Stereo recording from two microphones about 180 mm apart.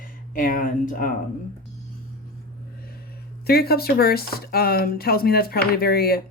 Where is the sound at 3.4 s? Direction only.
60° left (ahead or behind).